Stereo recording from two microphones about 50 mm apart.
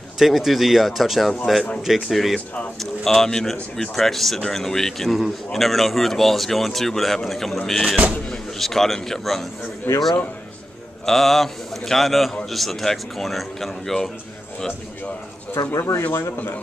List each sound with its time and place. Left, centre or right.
0.2 s a man's voice: centre
9.9 s a man's voice: left
11.1 s a man's voice: centre
15.9 s speech: left